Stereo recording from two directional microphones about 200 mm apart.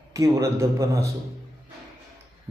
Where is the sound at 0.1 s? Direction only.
15° right (ahead or behind).